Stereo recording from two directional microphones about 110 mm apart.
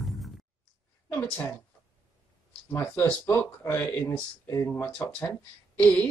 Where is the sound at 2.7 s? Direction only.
25° left (ahead or behind).